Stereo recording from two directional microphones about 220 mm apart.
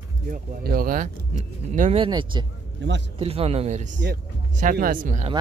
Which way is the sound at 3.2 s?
25° right (ahead or behind).